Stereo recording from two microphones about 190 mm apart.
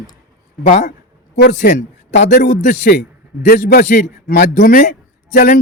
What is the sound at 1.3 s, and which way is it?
A man's voice, 55° left (ahead or behind).